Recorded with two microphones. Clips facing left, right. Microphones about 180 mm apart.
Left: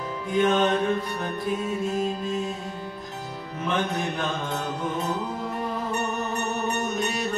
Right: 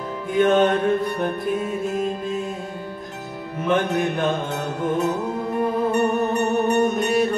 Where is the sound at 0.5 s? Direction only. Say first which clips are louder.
Right 6 dB; 55° right (ahead or behind).